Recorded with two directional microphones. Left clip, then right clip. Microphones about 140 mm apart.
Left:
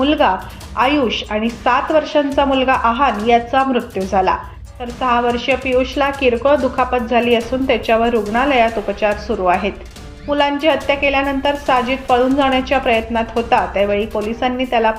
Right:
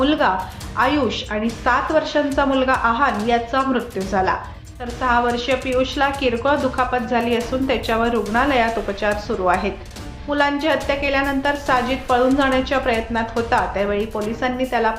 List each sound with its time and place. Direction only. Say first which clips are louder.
0.0 s a woman's voice: left 3 dB; 10° left (ahead or behind)